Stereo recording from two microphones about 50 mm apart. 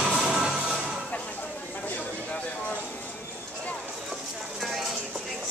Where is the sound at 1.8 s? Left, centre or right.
Left.